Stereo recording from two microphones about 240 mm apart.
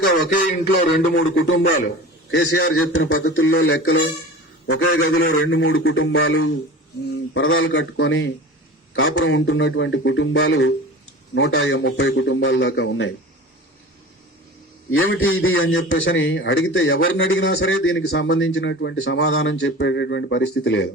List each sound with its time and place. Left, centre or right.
0.3 s speech: left
1.1 s a man's voice: left
2.3 s speech: left
4.6 s a man's voice: left
5.3 s a man's voice: left
14.8 s a man's voice: left